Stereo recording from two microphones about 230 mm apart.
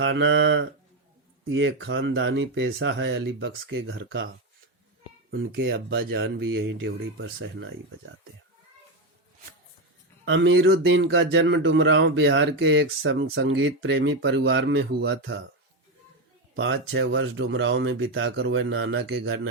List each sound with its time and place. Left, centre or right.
0.0 s mantra: right
1.5 s speech: right
5.4 s speech: right
10.2 s speech: right
16.6 s speech: right